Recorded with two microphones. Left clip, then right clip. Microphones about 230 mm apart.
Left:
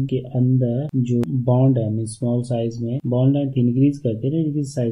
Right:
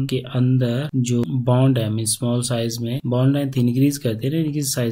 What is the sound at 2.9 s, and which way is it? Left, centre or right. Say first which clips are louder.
Speech: left 1 dB; right.